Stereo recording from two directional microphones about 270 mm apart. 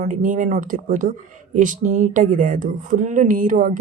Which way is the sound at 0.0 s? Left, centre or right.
Right.